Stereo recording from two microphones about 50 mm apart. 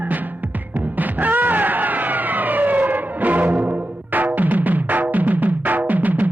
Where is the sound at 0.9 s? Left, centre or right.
Right.